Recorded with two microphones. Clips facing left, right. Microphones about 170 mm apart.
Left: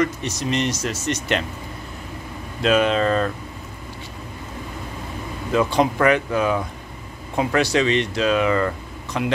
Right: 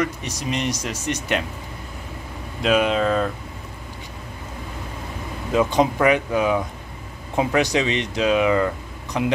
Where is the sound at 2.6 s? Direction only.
10° right (ahead or behind).